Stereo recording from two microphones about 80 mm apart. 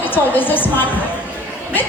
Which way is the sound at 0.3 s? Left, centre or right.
Left.